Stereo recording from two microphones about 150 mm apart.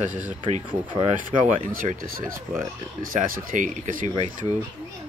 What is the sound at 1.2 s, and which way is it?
Speech, 65° right (ahead or behind).